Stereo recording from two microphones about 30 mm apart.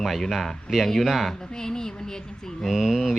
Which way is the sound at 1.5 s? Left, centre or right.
Centre.